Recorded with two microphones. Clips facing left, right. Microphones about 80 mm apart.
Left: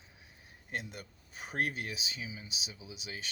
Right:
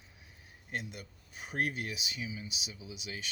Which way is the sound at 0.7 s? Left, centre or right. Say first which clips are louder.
Even; left.